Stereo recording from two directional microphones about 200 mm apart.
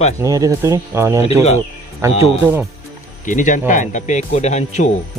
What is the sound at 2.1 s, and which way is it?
Speech, 30° left (ahead or behind).